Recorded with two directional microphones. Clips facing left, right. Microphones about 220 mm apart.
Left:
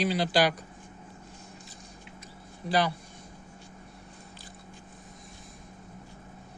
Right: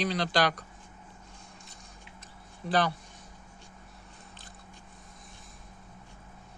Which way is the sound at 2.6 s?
Centre (ahead or behind).